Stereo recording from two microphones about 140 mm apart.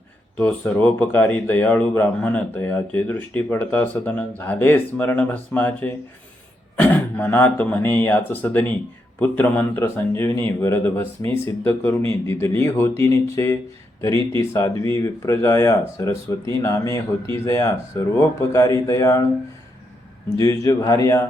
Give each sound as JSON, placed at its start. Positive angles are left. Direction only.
{"t": 0.3, "sound": "speech", "side_deg": 10}
{"t": 20.4, "sound": "speech", "side_deg": 25}